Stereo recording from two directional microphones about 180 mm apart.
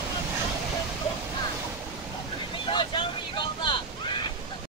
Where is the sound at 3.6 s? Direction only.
25° left (ahead or behind).